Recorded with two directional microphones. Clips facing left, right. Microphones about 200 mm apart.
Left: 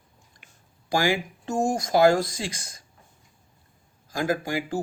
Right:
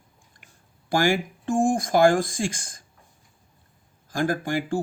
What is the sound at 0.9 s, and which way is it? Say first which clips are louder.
Speech: right 2 dB; 50° right (ahead or behind).